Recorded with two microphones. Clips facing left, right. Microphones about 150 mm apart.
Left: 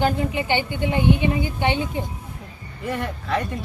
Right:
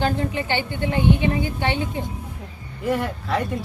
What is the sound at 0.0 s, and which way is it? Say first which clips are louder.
A woman's voice: left 1 dB; 15° left (ahead or behind).